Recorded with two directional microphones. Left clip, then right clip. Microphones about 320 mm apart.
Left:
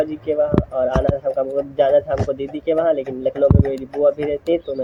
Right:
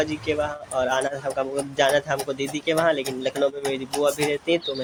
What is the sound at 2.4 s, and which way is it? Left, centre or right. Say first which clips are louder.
Speech: left 2 dB; centre.